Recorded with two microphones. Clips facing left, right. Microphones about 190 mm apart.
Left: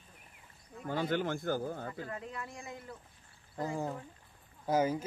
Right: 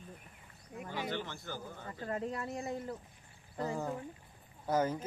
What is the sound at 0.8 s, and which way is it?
Speech, 50° left (ahead or behind).